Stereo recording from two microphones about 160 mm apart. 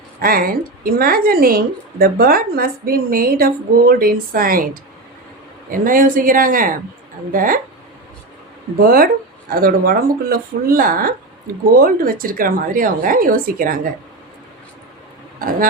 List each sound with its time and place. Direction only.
0.2 s a woman's voice: 65° right (ahead or behind)
8.8 s a woman's voice: 65° right (ahead or behind)
15.4 s speech: 65° right (ahead or behind)